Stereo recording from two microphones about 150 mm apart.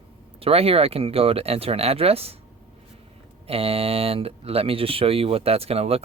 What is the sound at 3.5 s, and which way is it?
Speech, 40° right (ahead or behind).